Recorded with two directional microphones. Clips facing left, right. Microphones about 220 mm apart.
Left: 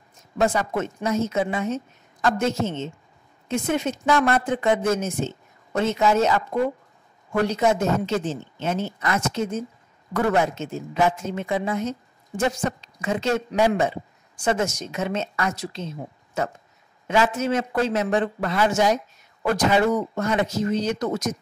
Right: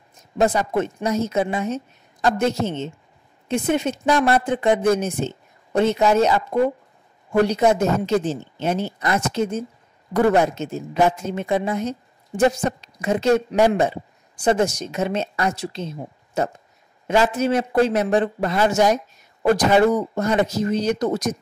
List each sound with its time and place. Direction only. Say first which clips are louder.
0.4 s speech: right 3 dB; 35° right (ahead or behind)
7.5 s speech: right 3 dB; 35° right (ahead or behind)
13.0 s speech: right 5 dB; 40° right (ahead or behind)
17.1 s speech: right 3 dB; 35° right (ahead or behind)